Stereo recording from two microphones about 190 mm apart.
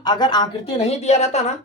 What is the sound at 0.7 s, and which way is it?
Speech, 35° left (ahead or behind).